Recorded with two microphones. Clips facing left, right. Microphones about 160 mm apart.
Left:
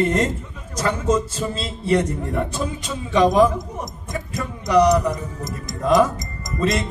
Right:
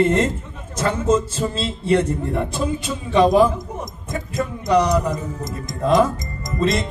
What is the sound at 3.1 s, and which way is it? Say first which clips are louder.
Speech: right 1 dB; 30° right (ahead or behind).